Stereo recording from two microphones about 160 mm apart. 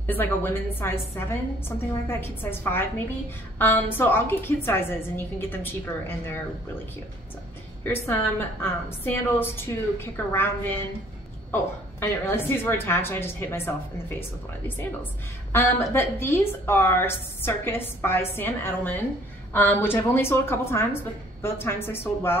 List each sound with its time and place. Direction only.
0.0 s a woman's voice: 10° left (ahead or behind)
7.8 s a woman's voice: 15° left (ahead or behind)
15.5 s a woman's voice: 15° left (ahead or behind)